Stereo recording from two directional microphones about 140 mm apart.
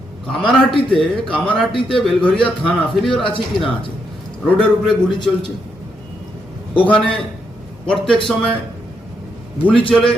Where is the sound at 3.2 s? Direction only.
40° left (ahead or behind).